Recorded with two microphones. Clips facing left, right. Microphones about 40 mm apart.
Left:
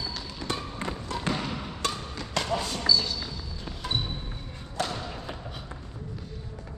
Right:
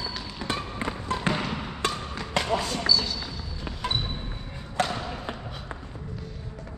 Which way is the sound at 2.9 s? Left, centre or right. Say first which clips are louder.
Even; right.